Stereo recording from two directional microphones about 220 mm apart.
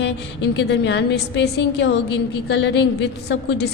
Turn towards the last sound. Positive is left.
turn(degrees=50)  # may be behind; listen again after turning